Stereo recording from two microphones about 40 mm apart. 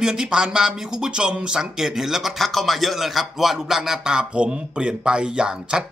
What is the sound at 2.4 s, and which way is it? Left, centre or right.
Speech, centre.